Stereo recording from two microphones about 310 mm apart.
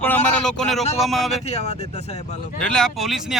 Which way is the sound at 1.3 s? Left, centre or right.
Left.